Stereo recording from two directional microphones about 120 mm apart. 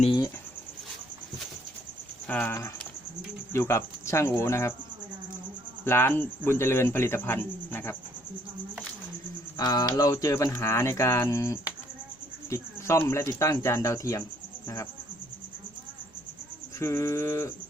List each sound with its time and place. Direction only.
2.2 s speech: 10° left (ahead or behind)
5.8 s speech: 20° left (ahead or behind)
9.6 s speech: 35° left (ahead or behind)
16.8 s speech: 20° left (ahead or behind)